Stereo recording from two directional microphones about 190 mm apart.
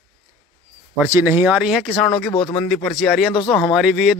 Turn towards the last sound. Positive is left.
turn(degrees=0)  # may be behind; listen again after turning